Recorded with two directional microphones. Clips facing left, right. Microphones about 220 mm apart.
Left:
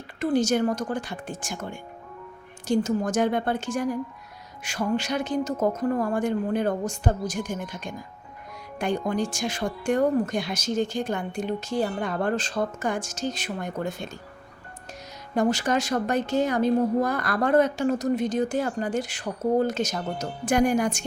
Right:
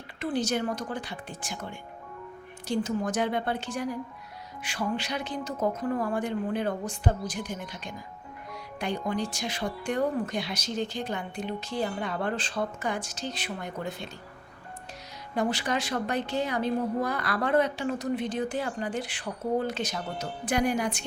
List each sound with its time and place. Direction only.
0.2 s a woman's voice: 45° left (ahead or behind)
15.4 s a woman's voice: 45° left (ahead or behind)